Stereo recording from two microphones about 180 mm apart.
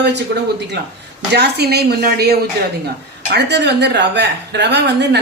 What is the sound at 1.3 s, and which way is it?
A woman's voice, 65° right (ahead or behind).